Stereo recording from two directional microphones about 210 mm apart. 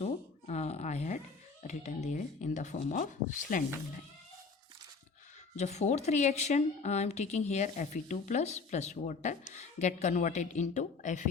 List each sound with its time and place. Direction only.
0.0 s a sound: 30° left (ahead or behind)
1.6 s a woman's voice: 35° left (ahead or behind)
5.5 s a woman's voice: 35° left (ahead or behind)